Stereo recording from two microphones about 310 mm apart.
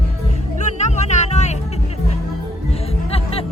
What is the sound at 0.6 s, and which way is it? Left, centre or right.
Music, left.